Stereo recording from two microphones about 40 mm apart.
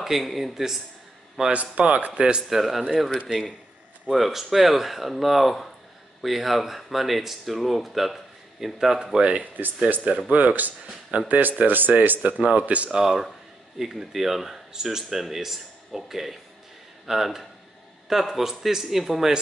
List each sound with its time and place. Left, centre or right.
0.0 s speech: centre
1.5 s speech: right
2.1 s speech: right
2.5 s speech: centre
4.1 s speech: centre
9.0 s speech: right
9.3 s speech: right
12.9 s speech: centre